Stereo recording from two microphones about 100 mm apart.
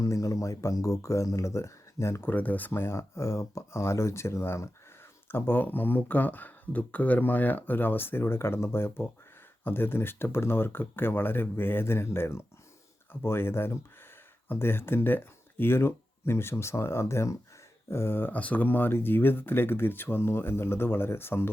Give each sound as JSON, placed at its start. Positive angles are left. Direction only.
{"t": 0.0, "sound": "speech", "side_deg": 30}
{"t": 2.3, "sound": "speech", "side_deg": 15}